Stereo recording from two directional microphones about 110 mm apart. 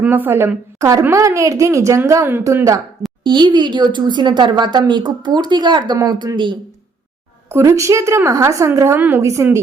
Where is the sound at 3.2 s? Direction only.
45° right (ahead or behind).